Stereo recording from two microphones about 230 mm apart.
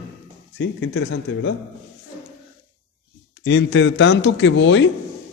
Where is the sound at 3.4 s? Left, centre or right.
Left.